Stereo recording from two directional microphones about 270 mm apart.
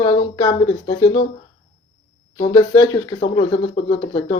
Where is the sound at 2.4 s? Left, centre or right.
Centre.